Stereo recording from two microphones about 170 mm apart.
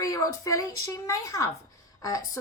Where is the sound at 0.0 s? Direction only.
20° left (ahead or behind).